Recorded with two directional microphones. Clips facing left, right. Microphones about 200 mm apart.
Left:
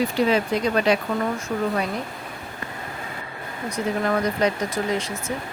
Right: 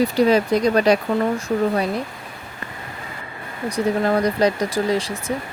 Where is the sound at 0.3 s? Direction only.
40° right (ahead or behind).